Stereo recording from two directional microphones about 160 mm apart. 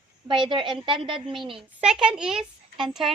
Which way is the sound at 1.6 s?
5° right (ahead or behind).